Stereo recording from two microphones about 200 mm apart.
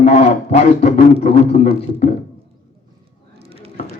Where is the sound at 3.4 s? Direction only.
30° right (ahead or behind).